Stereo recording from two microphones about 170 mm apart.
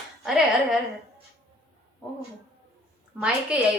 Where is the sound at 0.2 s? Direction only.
Centre (ahead or behind).